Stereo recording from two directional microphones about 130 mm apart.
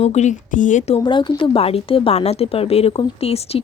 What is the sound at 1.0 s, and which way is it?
Speech, 40° left (ahead or behind).